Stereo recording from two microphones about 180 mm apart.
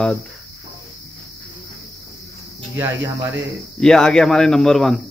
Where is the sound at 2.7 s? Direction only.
15° right (ahead or behind).